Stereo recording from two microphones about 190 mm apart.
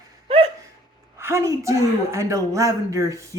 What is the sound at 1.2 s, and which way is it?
Speech, 15° right (ahead or behind).